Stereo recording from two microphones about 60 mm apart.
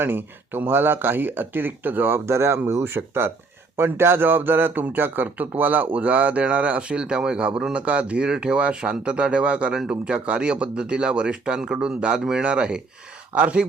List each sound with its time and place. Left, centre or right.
0.0 s speech: right
2.2 s a man's voice: right; by 13.7 s centre